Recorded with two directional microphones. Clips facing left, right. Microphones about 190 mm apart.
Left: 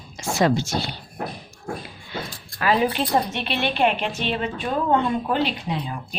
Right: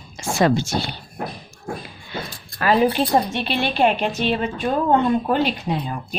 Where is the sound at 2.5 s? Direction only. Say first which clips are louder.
Right 3 dB; 40° right (ahead or behind).